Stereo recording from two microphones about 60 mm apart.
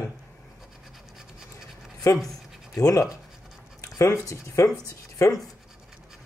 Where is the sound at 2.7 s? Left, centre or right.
Left.